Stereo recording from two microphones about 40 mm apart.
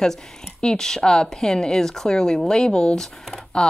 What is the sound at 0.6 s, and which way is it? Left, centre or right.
Speech, centre.